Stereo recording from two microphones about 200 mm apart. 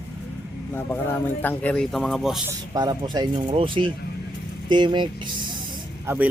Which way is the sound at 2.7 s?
20° right (ahead or behind).